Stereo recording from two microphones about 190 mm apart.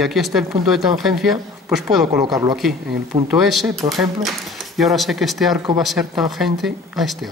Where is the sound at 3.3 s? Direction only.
Centre (ahead or behind).